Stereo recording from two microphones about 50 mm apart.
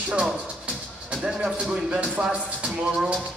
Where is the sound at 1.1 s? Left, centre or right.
Centre.